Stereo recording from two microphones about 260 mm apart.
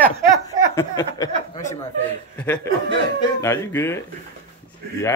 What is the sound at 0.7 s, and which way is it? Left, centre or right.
Speech, centre.